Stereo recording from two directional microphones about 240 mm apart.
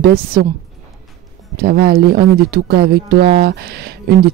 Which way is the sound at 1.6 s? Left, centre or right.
Right.